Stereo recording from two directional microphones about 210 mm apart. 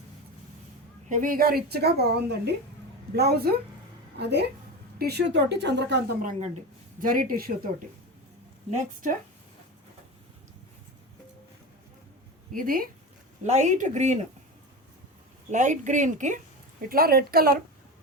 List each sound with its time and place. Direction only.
1.1 s a woman's voice: 40° right (ahead or behind)
7.0 s a woman's voice: 40° right (ahead or behind)
8.7 s a woman's voice: 35° right (ahead or behind)
12.5 s a woman's voice: 40° right (ahead or behind)
15.4 s a woman's voice: 35° right (ahead or behind)